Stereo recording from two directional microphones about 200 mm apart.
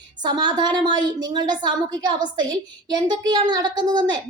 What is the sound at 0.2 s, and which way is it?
A woman's voice, 20° right (ahead or behind).